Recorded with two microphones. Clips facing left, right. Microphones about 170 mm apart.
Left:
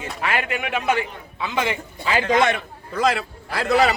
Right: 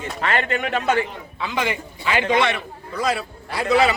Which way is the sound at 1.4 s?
20° left (ahead or behind).